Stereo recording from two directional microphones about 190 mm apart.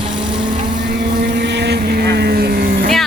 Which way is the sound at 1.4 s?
65° right (ahead or behind).